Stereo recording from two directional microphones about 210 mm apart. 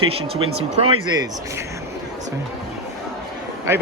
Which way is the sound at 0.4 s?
90° right.